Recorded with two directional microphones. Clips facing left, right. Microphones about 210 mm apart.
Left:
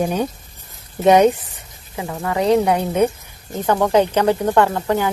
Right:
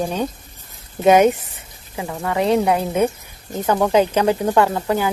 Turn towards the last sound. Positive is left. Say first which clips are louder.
# left 1 dB
turn(degrees=-15)  # may be behind; listen again after turning